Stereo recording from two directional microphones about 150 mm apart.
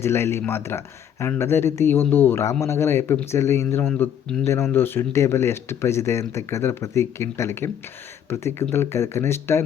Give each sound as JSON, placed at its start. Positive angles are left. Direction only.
{"t": 0.0, "sound": "speech", "side_deg": 15}